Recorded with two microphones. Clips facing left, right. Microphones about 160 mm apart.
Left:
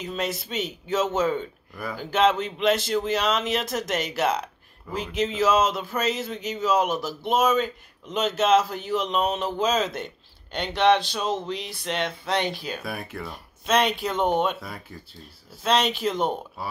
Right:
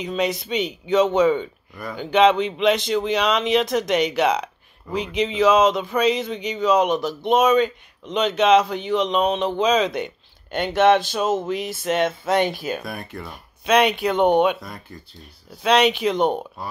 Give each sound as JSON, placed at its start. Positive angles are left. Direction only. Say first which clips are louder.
{"t": 0.0, "sound": "a man's voice", "louder": "right 6 dB", "side_deg": 5}
{"t": 10.5, "sound": "speech", "louder": "right 4 dB", "side_deg": -50}
{"t": 12.6, "sound": "a man's voice", "louder": "right 4 dB", "side_deg": 0}
{"t": 16.0, "sound": "speech", "louder": "right 4 dB", "side_deg": -70}